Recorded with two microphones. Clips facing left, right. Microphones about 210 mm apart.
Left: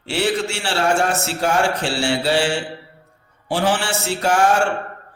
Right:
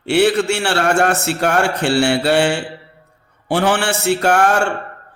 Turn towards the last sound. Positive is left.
turn(degrees=-65)  # may be behind; listen again after turning